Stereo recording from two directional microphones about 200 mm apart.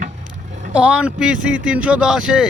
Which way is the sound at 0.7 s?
5° right (ahead or behind).